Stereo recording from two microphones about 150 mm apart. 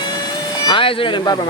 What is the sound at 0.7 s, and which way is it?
Speech, 35° left (ahead or behind).